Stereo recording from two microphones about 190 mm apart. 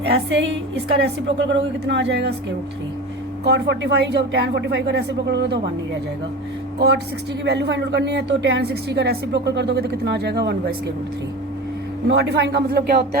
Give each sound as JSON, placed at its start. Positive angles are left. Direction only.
{"t": 0.1, "sound": "a woman's voice", "side_deg": -65}
{"t": 3.4, "sound": "speech", "side_deg": -65}
{"t": 7.4, "sound": "speech", "side_deg": -60}
{"t": 12.0, "sound": "speech", "side_deg": -65}